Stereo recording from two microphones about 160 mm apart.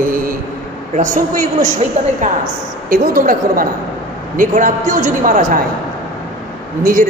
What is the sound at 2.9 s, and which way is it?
A woman's voice, 60° right (ahead or behind).